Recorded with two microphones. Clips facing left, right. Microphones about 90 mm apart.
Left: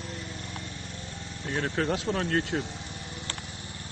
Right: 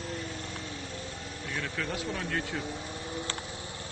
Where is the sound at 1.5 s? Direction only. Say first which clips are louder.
Left 7 dB; 45° left (ahead or behind).